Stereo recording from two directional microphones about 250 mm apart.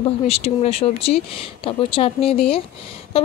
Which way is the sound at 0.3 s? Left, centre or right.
Left.